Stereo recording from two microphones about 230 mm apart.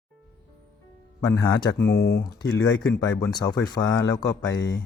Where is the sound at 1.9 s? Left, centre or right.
Left.